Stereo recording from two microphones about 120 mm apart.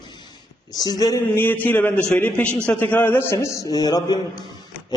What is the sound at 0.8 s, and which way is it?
Speech, 30° left (ahead or behind).